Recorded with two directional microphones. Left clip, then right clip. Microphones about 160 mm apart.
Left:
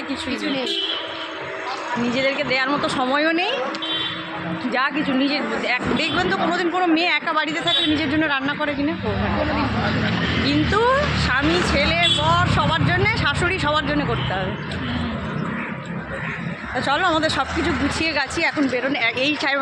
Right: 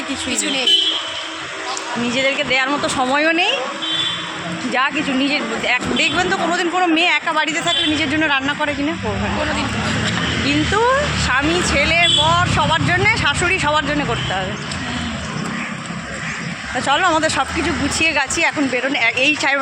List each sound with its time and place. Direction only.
2.1 s speech: 15° right (ahead or behind)
4.7 s speech: 15° right (ahead or behind)
10.4 s speech: 15° right (ahead or behind)
16.8 s speech: 15° right (ahead or behind)